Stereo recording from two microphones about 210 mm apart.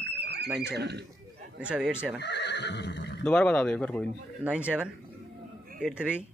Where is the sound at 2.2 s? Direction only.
55° left (ahead or behind).